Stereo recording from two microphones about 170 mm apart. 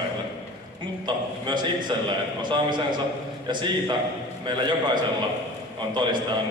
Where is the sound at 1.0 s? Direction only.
25° right (ahead or behind).